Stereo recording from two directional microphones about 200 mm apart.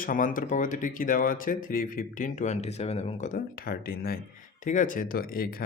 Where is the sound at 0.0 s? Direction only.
45° left (ahead or behind).